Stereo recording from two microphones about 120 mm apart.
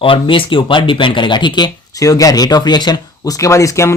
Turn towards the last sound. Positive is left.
turn(degrees=25)  # may be behind; listen again after turning